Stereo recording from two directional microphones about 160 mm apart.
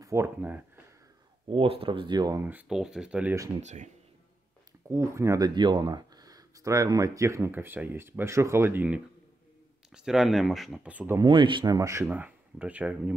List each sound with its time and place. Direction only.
0.0 s speech: 15° right (ahead or behind)
1.5 s speech: 35° right (ahead or behind)
2.4 s speech: 5° right (ahead or behind)
3.6 s speech: 45° right (ahead or behind)
4.8 s speech: 15° right (ahead or behind)
11.1 s speech: 30° right (ahead or behind); by 13.1 s 10° right (ahead or behind)